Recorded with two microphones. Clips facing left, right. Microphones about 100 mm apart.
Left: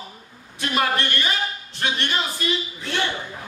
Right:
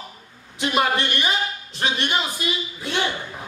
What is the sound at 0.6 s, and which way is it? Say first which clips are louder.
A woman's voice: right 2 dB; 20° right (ahead or behind).